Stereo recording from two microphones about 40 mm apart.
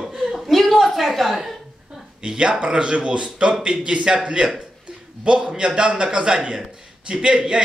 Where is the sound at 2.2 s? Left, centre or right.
Centre.